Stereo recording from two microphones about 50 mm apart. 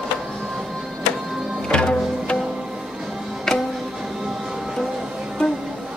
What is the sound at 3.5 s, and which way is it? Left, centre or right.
Music, centre.